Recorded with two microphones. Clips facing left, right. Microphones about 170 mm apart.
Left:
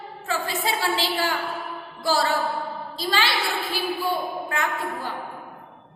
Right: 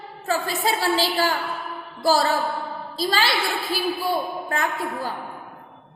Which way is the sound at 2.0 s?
40° right (ahead or behind).